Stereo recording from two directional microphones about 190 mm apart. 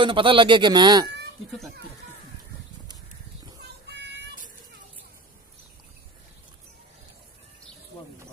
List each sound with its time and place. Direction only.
0.0 s speech: 25° right (ahead or behind)
3.6 s child singing: 60° right (ahead or behind)